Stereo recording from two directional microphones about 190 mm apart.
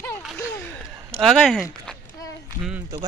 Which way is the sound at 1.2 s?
Centre (ahead or behind).